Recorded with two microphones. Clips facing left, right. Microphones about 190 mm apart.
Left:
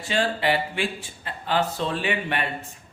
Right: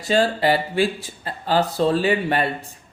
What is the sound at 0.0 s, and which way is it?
Speech, 40° right (ahead or behind).